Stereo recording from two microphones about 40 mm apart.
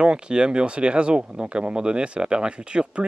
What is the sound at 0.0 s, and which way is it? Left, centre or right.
Speech, right.